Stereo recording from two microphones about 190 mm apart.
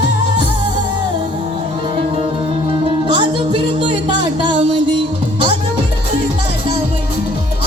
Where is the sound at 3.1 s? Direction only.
25° right (ahead or behind).